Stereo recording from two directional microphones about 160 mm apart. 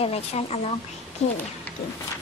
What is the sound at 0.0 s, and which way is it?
Speech, 40° left (ahead or behind).